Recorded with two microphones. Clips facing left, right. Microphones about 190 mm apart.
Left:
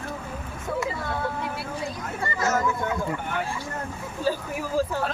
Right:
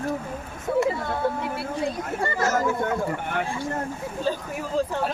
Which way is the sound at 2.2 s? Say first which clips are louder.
Right 1 dB; 50° right (ahead or behind).